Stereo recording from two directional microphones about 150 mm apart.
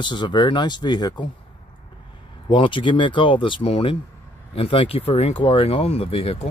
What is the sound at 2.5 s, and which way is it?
Speech, 35° left (ahead or behind).